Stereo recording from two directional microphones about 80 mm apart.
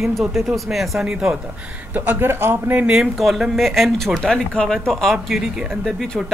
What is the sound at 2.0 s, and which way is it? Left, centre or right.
Speech, right.